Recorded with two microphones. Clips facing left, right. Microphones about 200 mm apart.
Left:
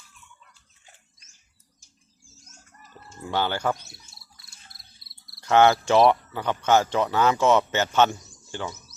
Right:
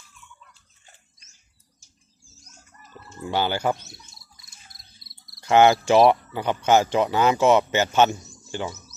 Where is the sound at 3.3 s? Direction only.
10° right (ahead or behind).